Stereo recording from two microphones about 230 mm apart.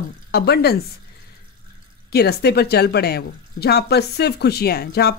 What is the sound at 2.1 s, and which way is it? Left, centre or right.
A woman's voice, left.